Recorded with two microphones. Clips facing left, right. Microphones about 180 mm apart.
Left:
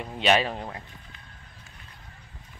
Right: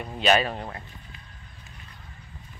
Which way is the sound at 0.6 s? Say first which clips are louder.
Even; 15° left (ahead or behind).